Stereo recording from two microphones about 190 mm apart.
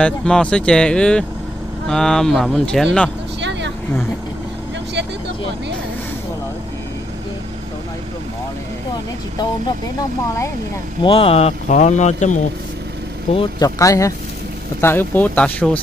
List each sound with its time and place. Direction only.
0.0 s speech: 5° left (ahead or behind)
3.3 s vehicle: 70° right (ahead or behind)
11.0 s speech: 30° left (ahead or behind)
13.3 s speech: 30° left (ahead or behind)
13.7 s speech: 15° left (ahead or behind)